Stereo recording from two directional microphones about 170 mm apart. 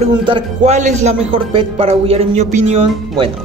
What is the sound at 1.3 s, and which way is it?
A man's voice, 30° right (ahead or behind).